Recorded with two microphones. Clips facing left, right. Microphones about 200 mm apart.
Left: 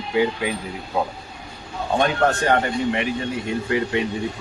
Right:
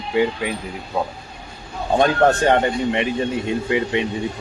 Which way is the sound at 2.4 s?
25° right (ahead or behind).